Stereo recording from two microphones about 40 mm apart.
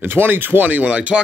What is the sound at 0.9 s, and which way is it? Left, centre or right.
Speech, right.